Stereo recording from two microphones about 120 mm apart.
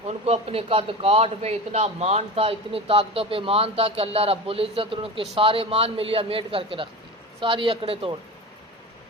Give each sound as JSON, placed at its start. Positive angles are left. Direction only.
{"t": 0.3, "sound": "a man's voice", "side_deg": -55}